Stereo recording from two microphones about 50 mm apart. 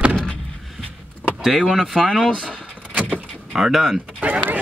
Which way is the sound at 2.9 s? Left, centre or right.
Right.